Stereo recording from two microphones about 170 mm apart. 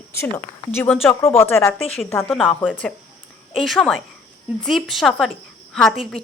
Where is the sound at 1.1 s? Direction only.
15° left (ahead or behind).